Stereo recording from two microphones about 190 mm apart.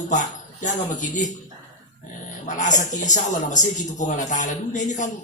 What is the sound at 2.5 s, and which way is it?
Speech, 40° left (ahead or behind).